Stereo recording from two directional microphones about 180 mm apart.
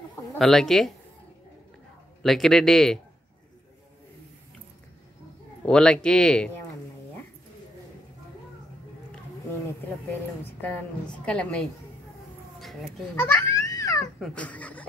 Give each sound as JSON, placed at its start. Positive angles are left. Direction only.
{"t": 0.4, "sound": "a woman's voice", "side_deg": 0}
{"t": 2.2, "sound": "a woman's voice", "side_deg": 0}
{"t": 5.7, "sound": "a woman's voice", "side_deg": 5}
{"t": 10.6, "sound": "a woman's voice", "side_deg": 5}
{"t": 13.2, "sound": "a sound", "side_deg": 15}
{"t": 14.2, "sound": "a sound", "side_deg": 5}